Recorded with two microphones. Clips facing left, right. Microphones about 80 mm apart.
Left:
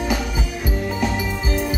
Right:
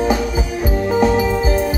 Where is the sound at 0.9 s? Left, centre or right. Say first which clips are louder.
Right 12 dB; right.